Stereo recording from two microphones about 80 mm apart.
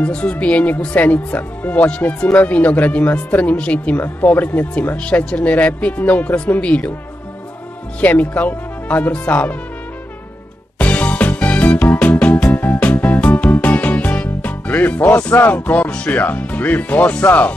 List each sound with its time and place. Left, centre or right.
0.0 s speech: centre
8.0 s speech: left
10.8 s music: centre
15.4 s speech: centre